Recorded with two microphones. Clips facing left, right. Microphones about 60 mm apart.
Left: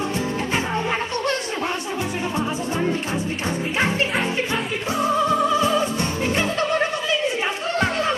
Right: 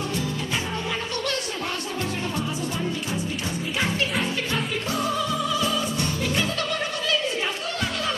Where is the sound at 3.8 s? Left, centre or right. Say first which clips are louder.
Left 3 dB; left.